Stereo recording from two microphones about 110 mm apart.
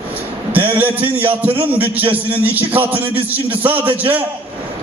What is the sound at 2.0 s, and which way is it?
Speech, 55° right (ahead or behind).